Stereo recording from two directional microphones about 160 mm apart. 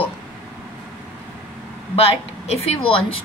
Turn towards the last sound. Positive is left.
turn(degrees=35)  # may be behind; listen again after turning